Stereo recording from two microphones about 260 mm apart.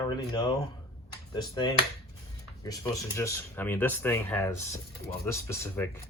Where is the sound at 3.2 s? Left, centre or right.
Centre.